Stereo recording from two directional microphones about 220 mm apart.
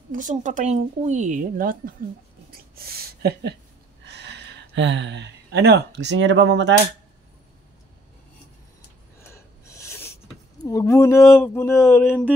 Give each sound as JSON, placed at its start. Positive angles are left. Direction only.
{"t": 0.1, "sound": "speech", "side_deg": -35}
{"t": 2.5, "sound": "a sound", "side_deg": -45}
{"t": 4.0, "sound": "speech", "side_deg": -50}
{"t": 9.3, "sound": "gasp", "side_deg": 10}
{"t": 10.6, "sound": "speech", "side_deg": 15}